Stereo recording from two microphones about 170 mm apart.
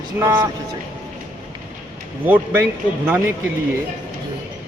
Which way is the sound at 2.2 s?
10° right (ahead or behind).